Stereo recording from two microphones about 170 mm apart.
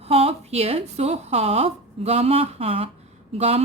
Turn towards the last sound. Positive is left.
turn(degrees=-35)  # may be behind; listen again after turning